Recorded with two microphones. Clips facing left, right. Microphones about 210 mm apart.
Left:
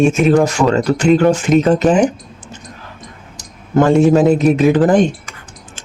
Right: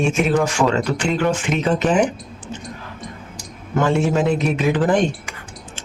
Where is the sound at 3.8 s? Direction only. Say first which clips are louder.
Left 8 dB; 40° left (ahead or behind).